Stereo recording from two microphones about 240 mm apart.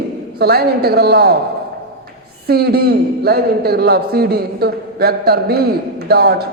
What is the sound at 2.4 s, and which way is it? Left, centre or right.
A man's voice, right.